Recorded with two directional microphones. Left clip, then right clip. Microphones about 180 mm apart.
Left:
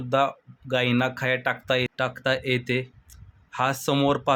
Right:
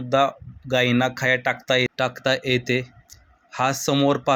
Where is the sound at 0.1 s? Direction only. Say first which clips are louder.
Right 3 dB; 5° right (ahead or behind).